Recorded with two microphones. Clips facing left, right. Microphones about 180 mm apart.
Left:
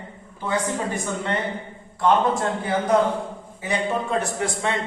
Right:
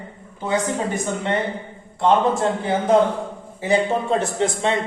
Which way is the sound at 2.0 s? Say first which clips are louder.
Right 2 dB; 25° right (ahead or behind).